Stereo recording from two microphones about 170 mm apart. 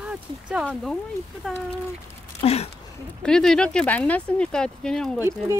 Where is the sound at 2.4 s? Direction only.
35° left (ahead or behind).